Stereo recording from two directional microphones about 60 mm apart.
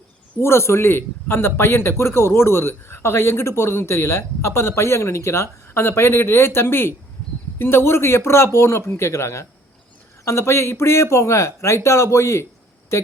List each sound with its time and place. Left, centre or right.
0.3 s a man's voice: left